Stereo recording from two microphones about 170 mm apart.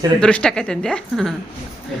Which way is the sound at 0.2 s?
5° left (ahead or behind).